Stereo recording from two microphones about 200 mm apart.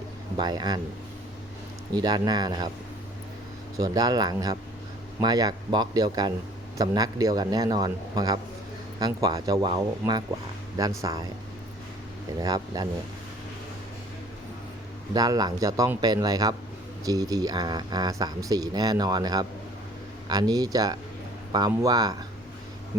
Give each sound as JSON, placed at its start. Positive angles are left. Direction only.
{"t": 0.3, "sound": "speech", "side_deg": -20}
{"t": 1.9, "sound": "speech", "side_deg": -20}
{"t": 3.8, "sound": "speech", "side_deg": -20}
{"t": 12.4, "sound": "speech", "side_deg": -20}
{"t": 15.1, "sound": "speech", "side_deg": -20}